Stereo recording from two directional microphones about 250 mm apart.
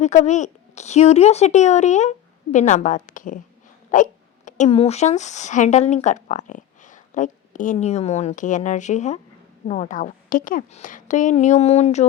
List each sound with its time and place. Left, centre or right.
0.0 s a woman's voice: left